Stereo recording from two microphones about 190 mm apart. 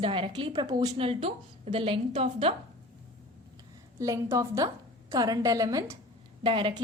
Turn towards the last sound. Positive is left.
turn(degrees=-25)  # may be behind; listen again after turning